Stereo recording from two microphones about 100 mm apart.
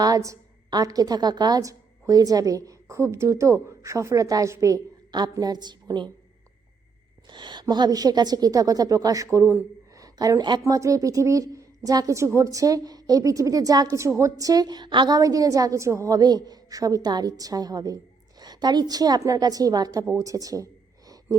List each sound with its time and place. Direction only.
0.0 s a woman's voice: 35° right (ahead or behind)
7.3 s a woman's voice: 50° right (ahead or behind); by 9.6 s 30° right (ahead or behind)
9.9 s a sound: 35° right (ahead or behind)
10.6 s a woman's voice: 30° right (ahead or behind)